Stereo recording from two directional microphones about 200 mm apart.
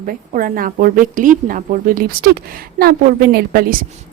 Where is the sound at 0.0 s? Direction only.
45° right (ahead or behind).